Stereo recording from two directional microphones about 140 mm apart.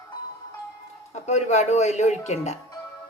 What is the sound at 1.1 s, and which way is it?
Speech, 55° left (ahead or behind).